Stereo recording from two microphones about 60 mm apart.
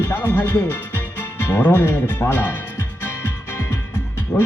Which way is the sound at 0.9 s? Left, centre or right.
Left.